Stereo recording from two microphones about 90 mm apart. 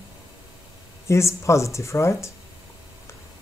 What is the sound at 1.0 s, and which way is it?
Speech, 35° left (ahead or behind).